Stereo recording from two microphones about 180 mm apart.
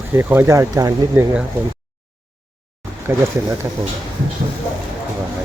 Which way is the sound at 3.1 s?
10° right (ahead or behind).